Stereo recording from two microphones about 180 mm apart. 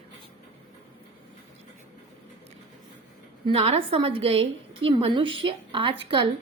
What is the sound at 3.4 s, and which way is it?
A woman's voice, 30° right (ahead or behind).